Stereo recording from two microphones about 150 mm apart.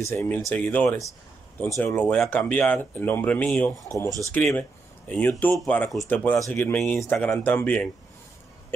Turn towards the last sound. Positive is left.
turn(degrees=10)  # may be behind; listen again after turning